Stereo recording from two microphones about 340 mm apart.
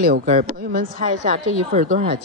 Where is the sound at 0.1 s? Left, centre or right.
Right.